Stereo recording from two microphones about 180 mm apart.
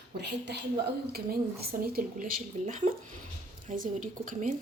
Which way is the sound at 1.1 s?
60° right (ahead or behind).